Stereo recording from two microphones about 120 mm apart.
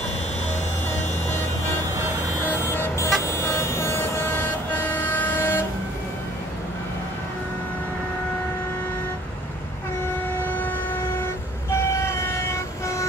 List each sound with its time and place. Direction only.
2.4 s music: 15° left (ahead or behind)
3.3 s a sound: 20° left (ahead or behind)
4.7 s vehicle: 15° left (ahead or behind)
11.7 s vehicle: 20° left (ahead or behind)